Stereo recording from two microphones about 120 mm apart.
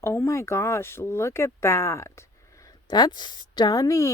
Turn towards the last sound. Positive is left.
turn(degrees=30)  # may be behind; listen again after turning